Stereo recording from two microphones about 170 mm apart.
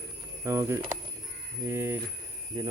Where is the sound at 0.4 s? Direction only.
15° right (ahead or behind).